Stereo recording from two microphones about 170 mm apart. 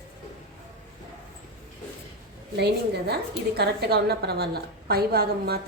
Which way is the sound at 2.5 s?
75° right (ahead or behind).